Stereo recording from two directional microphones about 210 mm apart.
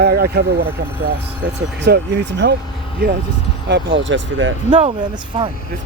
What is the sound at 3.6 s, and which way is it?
Speech, 60° right (ahead or behind).